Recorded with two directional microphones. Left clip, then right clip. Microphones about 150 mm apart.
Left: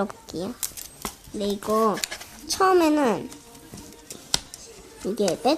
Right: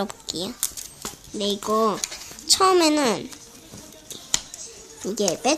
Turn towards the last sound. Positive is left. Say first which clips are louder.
# even
turn(degrees=0)  # may be behind; listen again after turning